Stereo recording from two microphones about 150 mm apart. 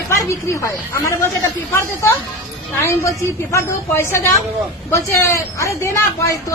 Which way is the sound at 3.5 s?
15° left (ahead or behind).